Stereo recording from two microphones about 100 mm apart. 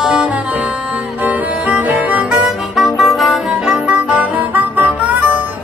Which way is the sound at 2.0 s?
10° right (ahead or behind).